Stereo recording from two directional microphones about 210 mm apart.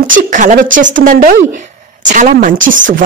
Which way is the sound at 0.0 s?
40° right (ahead or behind).